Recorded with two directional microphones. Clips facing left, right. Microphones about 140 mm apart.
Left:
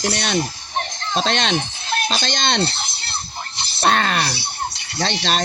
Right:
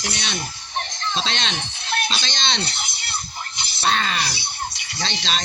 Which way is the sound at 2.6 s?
30° left (ahead or behind).